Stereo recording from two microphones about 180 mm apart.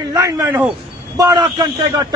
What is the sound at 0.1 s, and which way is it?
A man's voice, 20° right (ahead or behind).